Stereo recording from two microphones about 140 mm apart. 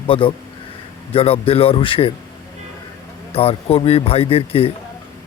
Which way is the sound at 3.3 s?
45° left (ahead or behind).